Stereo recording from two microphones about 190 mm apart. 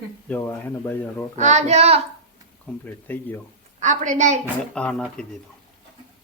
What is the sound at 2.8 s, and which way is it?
Speech, 10° left (ahead or behind).